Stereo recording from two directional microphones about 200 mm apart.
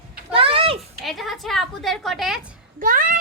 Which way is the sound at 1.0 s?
Centre (ahead or behind).